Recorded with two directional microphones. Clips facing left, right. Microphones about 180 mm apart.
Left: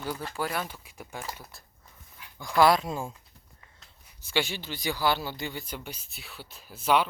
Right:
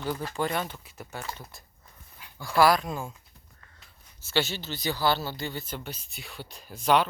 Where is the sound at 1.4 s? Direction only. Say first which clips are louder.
Right 2 dB; centre (ahead or behind).